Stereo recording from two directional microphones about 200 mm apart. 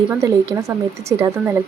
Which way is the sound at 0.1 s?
15° right (ahead or behind).